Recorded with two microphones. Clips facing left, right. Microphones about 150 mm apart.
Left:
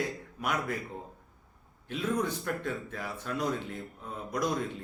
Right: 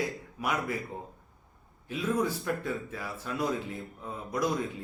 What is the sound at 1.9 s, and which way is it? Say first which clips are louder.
Speech: right 1 dB; 5° right (ahead or behind).